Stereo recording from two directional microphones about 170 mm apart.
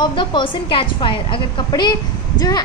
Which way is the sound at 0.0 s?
30° left (ahead or behind).